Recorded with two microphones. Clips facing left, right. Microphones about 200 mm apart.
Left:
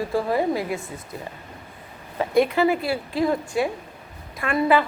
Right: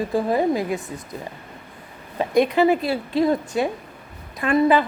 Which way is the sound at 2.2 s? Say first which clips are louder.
Right 2 dB; 20° right (ahead or behind).